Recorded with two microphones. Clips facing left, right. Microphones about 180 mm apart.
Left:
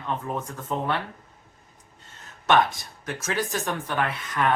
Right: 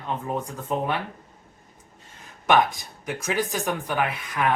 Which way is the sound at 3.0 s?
15° right (ahead or behind).